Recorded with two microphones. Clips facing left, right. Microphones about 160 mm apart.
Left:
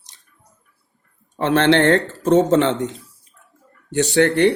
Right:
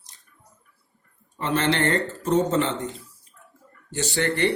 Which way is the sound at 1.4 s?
80° left.